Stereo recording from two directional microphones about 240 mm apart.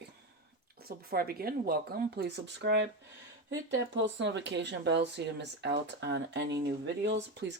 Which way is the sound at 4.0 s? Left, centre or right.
Right.